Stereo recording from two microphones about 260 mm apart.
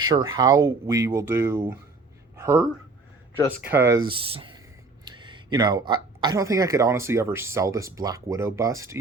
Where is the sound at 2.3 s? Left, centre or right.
Centre.